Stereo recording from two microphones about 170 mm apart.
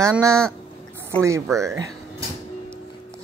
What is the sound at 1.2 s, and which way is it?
Speech, 15° right (ahead or behind).